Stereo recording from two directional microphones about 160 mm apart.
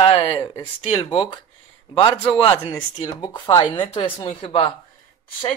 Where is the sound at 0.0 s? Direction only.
40° left (ahead or behind).